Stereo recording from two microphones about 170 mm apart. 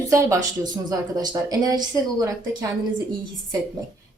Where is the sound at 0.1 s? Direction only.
20° right (ahead or behind).